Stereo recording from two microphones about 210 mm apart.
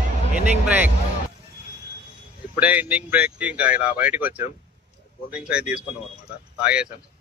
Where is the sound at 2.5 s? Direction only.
10° right (ahead or behind).